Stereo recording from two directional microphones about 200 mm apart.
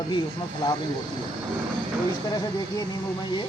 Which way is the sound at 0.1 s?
25° left (ahead or behind).